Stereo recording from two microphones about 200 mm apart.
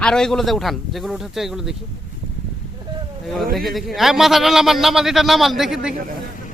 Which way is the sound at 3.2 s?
Centre (ahead or behind).